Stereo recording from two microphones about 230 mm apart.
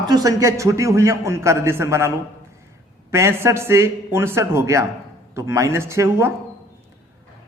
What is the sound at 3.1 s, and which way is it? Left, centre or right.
A man's voice, centre.